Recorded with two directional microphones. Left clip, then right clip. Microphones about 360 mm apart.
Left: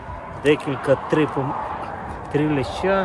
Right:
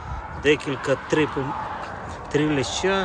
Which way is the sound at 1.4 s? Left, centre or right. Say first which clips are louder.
Left 3 dB; centre.